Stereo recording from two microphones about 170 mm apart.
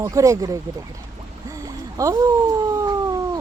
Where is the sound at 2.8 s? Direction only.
20° right (ahead or behind).